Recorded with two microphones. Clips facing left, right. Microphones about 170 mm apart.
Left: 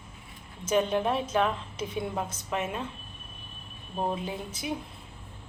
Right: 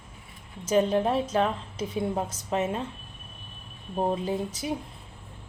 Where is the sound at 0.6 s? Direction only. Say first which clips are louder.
Right 3 dB; 35° right (ahead or behind).